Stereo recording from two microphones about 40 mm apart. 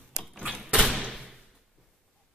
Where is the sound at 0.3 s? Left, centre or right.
Centre.